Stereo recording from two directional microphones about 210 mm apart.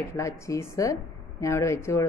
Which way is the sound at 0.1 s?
15° left (ahead or behind).